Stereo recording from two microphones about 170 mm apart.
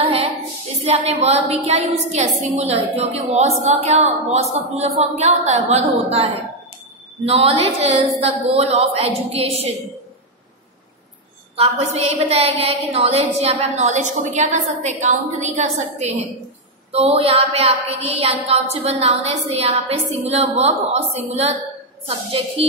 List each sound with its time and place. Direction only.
0.0 s child singing: 35° right (ahead or behind)
0.7 s a woman's voice: 40° right (ahead or behind)
11.5 s a woman's voice: 35° right (ahead or behind)